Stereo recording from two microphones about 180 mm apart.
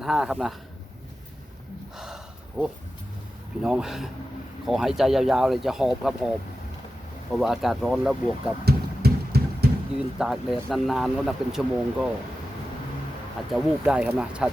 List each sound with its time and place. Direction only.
0.0 s speech: centre (ahead or behind)
2.0 s a sound: centre (ahead or behind)
3.6 s speech: 5° right (ahead or behind)
7.3 s speech: centre (ahead or behind)
8.6 s music: 60° right (ahead or behind)
10.2 s speech: centre (ahead or behind)
13.5 s speech: 5° right (ahead or behind)